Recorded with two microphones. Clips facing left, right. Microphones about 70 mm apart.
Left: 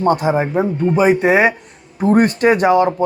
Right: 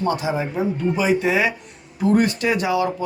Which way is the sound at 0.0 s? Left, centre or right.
Left.